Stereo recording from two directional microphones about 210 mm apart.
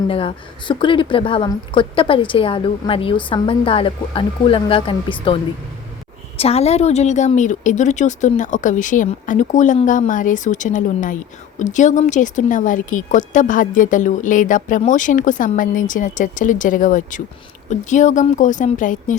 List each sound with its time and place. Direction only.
0.1 s a woman's voice: 25° left (ahead or behind)